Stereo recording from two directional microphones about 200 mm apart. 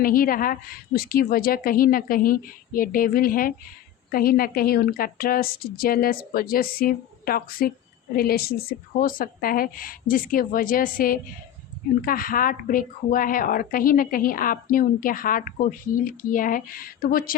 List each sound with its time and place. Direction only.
0.0 s a woman's voice: 45° left (ahead or behind)